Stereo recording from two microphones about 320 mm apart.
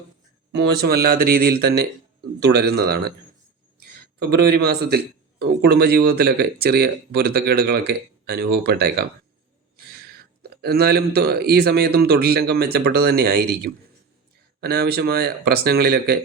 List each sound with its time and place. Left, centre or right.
0.5 s a man's voice: right
4.4 s a man's voice: right
10.6 s speech: right